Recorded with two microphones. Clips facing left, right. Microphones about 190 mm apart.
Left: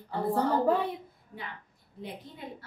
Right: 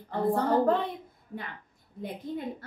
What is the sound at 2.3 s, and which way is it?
Speech, 50° right (ahead or behind).